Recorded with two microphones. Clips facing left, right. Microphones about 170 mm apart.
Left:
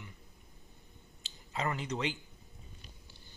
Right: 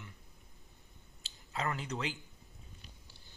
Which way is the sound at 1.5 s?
5° left (ahead or behind).